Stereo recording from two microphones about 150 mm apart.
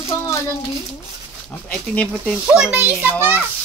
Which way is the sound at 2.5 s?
10° right (ahead or behind).